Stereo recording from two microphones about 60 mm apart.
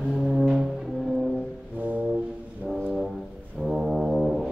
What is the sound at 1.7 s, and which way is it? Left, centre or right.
Brass instrument, right.